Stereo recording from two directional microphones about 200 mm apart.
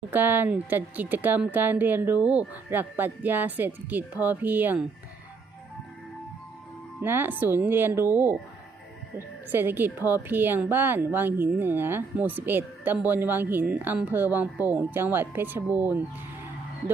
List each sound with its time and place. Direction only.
0.1 s a woman's voice: 10° right (ahead or behind)
7.0 s a woman's voice: 10° right (ahead or behind)